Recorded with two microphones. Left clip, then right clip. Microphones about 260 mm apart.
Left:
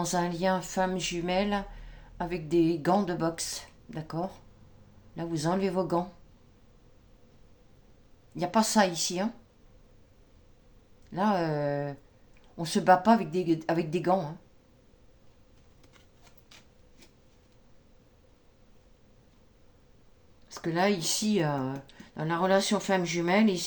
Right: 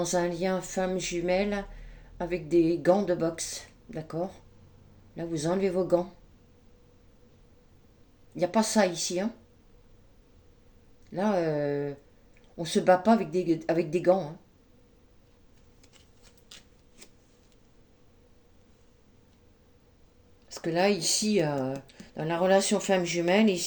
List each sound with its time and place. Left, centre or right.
0.0 s speech: left
8.4 s speech: left
11.1 s speech: left
20.5 s a sound: left
20.8 s speech: left